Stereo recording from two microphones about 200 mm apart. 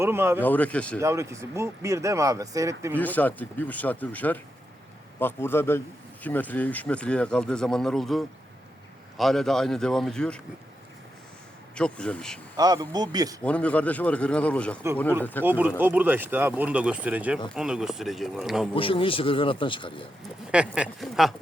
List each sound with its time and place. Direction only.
0.0 s speech: 10° right (ahead or behind)
0.4 s speech: 10° left (ahead or behind)
0.9 s speech: 15° right (ahead or behind)
2.9 s speech: 10° left (ahead or behind)
11.7 s speech: 5° left (ahead or behind)
12.5 s speech: 20° right (ahead or behind)
13.4 s speech: 5° left (ahead or behind)
15.4 s speech: 10° right (ahead or behind)
18.7 s a man's voice: 25° left (ahead or behind)
20.5 s speech: 5° right (ahead or behind)